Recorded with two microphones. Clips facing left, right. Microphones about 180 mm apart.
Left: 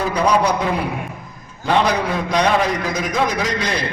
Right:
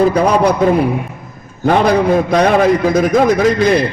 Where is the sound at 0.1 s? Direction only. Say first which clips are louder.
Right 5 dB; 55° right (ahead or behind).